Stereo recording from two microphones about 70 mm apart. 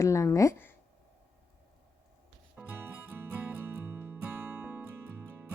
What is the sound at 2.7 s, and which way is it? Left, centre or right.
Music, right.